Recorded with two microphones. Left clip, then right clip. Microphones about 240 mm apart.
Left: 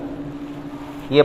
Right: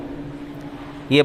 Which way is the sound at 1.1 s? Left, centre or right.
Right.